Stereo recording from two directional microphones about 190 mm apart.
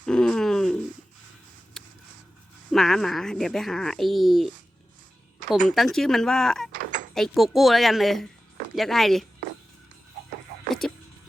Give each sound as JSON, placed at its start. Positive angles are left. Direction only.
{"t": 0.0, "sound": "a sound", "side_deg": 5}
{"t": 2.7, "sound": "speech", "side_deg": 0}
{"t": 5.6, "sound": "speech", "side_deg": 0}
{"t": 10.7, "sound": "vehicle", "side_deg": 0}